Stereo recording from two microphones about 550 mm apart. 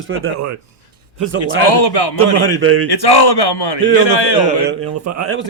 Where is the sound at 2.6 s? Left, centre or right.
Right.